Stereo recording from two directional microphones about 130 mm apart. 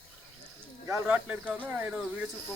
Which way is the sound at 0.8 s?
15° right (ahead or behind).